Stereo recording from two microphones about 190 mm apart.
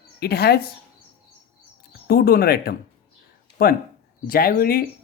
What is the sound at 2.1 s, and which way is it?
Speech, 50° left (ahead or behind).